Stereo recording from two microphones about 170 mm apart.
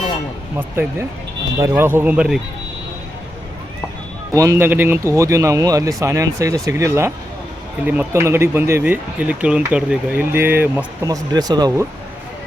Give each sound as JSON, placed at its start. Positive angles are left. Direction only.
{"t": 0.5, "sound": "speech", "side_deg": -10}
{"t": 4.4, "sound": "speech", "side_deg": -15}